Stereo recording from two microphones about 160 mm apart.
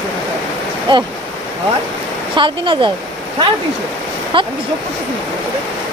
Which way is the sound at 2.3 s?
30° right (ahead or behind).